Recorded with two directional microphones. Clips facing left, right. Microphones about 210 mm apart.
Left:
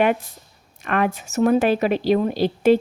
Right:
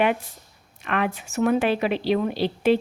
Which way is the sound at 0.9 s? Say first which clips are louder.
Left 4 dB; 45° left (ahead or behind).